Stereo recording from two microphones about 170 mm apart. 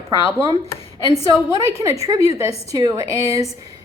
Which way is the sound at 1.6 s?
20° right (ahead or behind).